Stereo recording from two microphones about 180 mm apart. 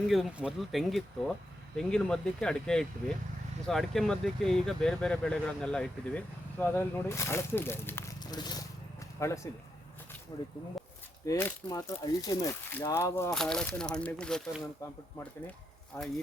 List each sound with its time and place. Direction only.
0.1 s speech: 5° right (ahead or behind); by 13.3 s 15° left (ahead or behind)
13.3 s speech: 5° left (ahead or behind)
15.9 s speech: 15° left (ahead or behind)